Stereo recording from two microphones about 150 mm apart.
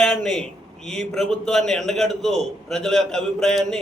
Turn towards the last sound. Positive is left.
turn(degrees=0)  # may be behind; listen again after turning